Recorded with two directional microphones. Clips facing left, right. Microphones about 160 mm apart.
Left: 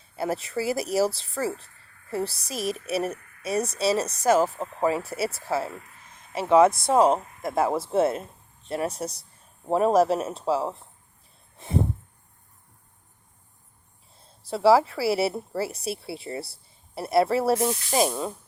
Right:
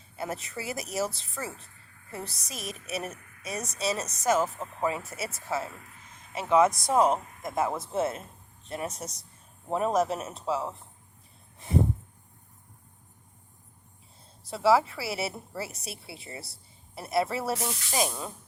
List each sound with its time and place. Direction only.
0.2 s speech: 30° left (ahead or behind)
14.4 s speech: 35° left (ahead or behind)